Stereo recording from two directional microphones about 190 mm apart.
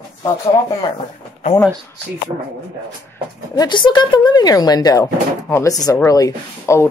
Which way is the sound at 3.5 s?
20° left (ahead or behind).